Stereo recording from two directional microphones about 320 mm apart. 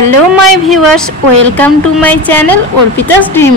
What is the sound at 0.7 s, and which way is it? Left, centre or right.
A woman's voice, centre.